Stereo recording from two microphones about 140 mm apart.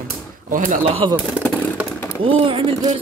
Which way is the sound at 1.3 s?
5° right (ahead or behind).